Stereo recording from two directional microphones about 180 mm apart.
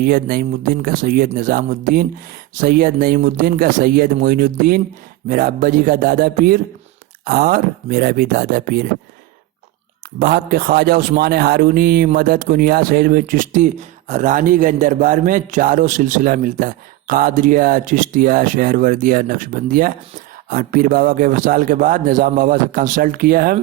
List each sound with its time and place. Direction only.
0.0 s speech: 55° right (ahead or behind)
10.2 s speech: 55° right (ahead or behind)